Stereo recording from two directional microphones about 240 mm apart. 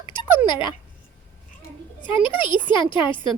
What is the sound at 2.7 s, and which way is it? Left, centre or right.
Speech, centre.